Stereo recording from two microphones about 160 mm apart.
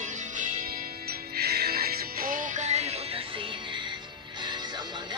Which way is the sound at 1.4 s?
75° right (ahead or behind).